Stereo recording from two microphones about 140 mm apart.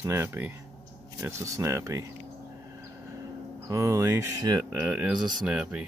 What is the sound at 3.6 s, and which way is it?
Speech, 25° right (ahead or behind).